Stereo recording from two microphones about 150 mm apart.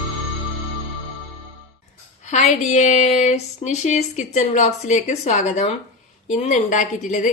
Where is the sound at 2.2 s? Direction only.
50° left (ahead or behind).